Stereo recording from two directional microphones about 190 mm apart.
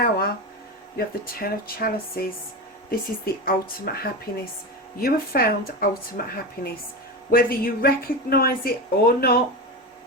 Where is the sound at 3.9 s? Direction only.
55° left (ahead or behind).